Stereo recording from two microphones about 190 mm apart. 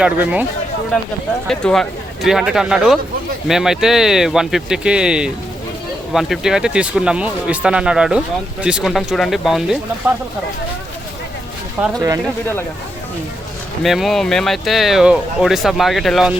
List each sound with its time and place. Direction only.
0.0 s speech: 10° right (ahead or behind)
1.5 s speech: 5° left (ahead or behind)
11.9 s speech: 15° right (ahead or behind)
13.8 s speech: centre (ahead or behind)